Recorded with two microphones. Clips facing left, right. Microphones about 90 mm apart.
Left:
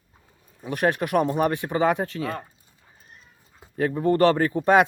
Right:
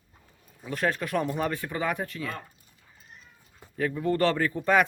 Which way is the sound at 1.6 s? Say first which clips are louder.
Left 7 dB; 35° left (ahead or behind).